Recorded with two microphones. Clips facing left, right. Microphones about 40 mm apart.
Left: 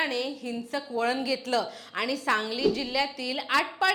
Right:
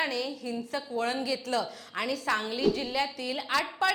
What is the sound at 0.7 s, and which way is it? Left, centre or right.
Speech, left.